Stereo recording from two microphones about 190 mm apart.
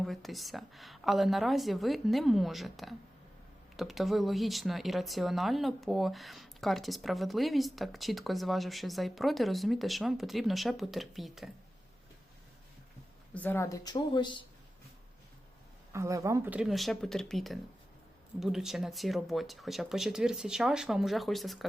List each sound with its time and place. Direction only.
0.0 s speech: centre (ahead or behind)
13.3 s speech: 10° left (ahead or behind)
15.9 s speech: 15° right (ahead or behind); by 21.7 s centre (ahead or behind)